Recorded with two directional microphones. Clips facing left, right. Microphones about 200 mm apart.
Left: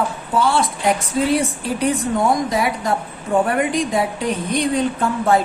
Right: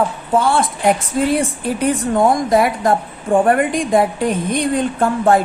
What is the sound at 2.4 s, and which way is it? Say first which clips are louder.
A woman's voice: right 6 dB; 50° right (ahead or behind).